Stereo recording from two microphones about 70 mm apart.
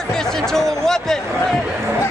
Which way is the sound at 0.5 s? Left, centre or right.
Centre.